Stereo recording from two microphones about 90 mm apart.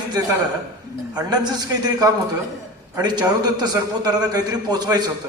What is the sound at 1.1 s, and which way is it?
Speech, 50° right (ahead or behind).